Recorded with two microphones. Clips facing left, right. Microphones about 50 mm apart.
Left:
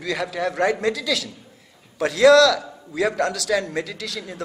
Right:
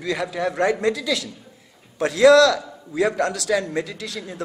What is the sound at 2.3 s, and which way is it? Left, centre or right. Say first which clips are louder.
A man's voice: even; right.